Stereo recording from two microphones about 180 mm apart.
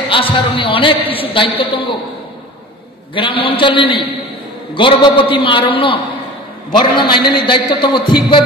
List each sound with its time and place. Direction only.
0.1 s a man's voice: 30° left (ahead or behind)
3.2 s a man's voice: 30° left (ahead or behind)